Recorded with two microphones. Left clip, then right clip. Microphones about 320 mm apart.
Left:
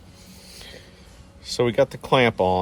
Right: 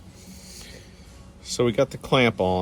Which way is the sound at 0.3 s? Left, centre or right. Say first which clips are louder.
Left 2 dB; left.